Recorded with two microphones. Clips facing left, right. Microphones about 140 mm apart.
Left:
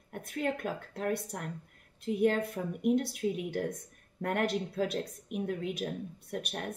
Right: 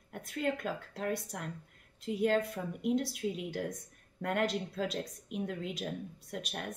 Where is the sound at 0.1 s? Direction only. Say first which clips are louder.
Left 1 dB; 55° left (ahead or behind).